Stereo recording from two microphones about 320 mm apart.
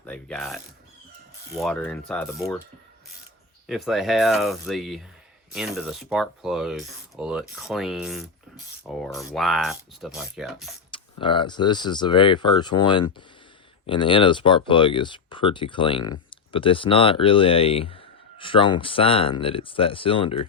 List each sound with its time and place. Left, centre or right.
0.0 s mechanisms: centre
1.5 s speech: centre
3.7 s speech: centre
10.9 s speech: centre